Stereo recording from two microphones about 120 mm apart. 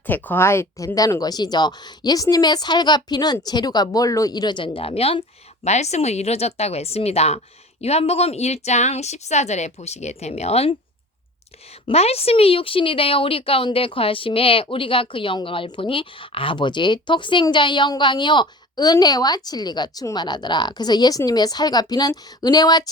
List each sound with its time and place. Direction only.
0.0 s a woman's voice: 15° left (ahead or behind); by 5.2 s 55° left (ahead or behind)
5.6 s speech: 70° left (ahead or behind)
11.9 s a woman's voice: 60° left (ahead or behind); by 22.9 s 35° left (ahead or behind)